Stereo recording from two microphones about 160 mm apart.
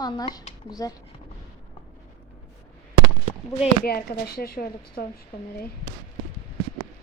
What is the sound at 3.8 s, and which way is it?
Speech, 70° left (ahead or behind).